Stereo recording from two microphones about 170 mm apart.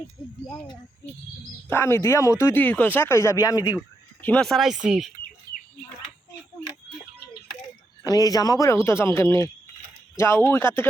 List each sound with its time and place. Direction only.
0.2 s speech: 25° left (ahead or behind)
1.7 s speech: 15° left (ahead or behind)
4.2 s speech: 5° left (ahead or behind)
8.0 s speech: 20° left (ahead or behind)